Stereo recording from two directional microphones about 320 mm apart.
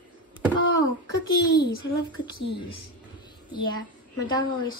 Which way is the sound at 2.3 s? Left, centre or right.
Left.